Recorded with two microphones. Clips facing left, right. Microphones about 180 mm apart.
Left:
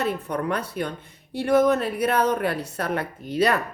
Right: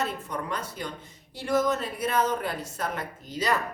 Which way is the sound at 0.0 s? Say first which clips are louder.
Left 6 dB; 60° left (ahead or behind).